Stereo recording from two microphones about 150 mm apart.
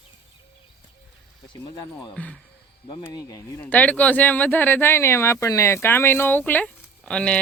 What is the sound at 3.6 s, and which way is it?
Speech, 10° left (ahead or behind).